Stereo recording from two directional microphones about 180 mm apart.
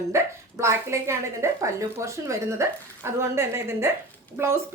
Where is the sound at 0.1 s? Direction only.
15° right (ahead or behind).